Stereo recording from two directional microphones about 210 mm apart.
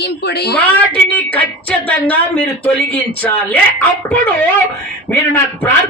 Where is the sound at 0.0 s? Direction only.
50° left (ahead or behind).